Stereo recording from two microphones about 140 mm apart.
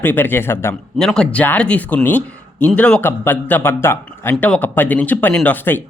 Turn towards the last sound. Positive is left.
turn(degrees=15)  # may be behind; listen again after turning